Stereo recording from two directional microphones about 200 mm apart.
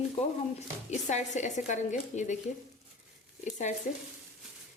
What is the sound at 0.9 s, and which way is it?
A woman's voice, 35° left (ahead or behind).